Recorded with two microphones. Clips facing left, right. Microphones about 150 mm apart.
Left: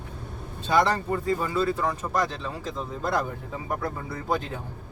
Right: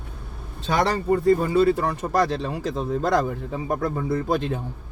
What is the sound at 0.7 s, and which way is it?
Speech, 85° right.